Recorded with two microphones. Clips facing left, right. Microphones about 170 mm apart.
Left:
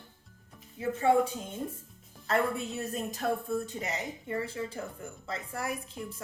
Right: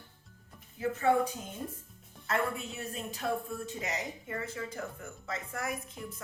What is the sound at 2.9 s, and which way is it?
Speech, 40° left (ahead or behind).